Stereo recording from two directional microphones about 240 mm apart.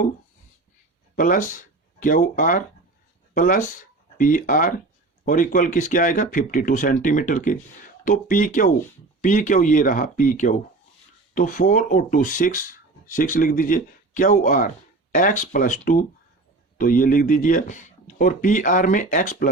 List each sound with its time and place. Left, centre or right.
1.1 s speech: left